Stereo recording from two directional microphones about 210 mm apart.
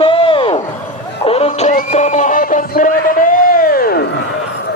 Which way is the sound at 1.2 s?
30° left (ahead or behind).